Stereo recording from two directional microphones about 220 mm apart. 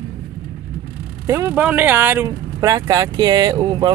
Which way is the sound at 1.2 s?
15° right (ahead or behind).